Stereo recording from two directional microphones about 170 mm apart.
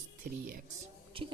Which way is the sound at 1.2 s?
30° right (ahead or behind).